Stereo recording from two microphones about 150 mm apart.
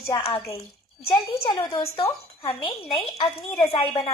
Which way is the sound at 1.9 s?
40° left (ahead or behind).